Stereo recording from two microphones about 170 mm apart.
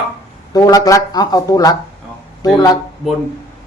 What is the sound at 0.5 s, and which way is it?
Speech, 20° left (ahead or behind).